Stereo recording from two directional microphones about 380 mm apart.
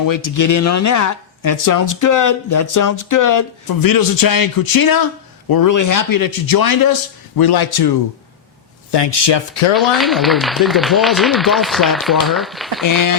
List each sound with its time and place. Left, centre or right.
0.1 s speech: left
8.9 s speech: left
9.7 s speech: centre
12.8 s speech: left